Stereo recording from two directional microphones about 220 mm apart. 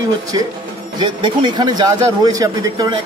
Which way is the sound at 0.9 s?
20° right (ahead or behind).